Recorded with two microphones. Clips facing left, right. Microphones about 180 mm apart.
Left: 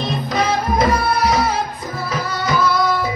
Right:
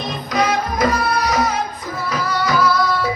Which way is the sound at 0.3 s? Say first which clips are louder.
Right 1 dB; 25° left (ahead or behind).